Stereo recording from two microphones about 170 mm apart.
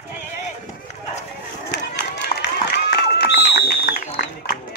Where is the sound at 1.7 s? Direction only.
85° left.